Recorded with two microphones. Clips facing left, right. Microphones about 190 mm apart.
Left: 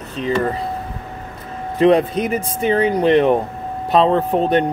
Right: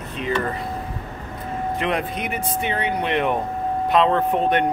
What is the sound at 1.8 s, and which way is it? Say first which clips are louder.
Speech: left 15 dB; 35° left (ahead or behind).